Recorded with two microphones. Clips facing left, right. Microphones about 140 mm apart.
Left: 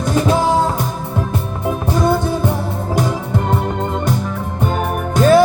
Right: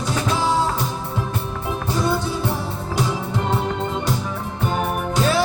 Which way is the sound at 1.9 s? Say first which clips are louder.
Left 5 dB; 50° left (ahead or behind).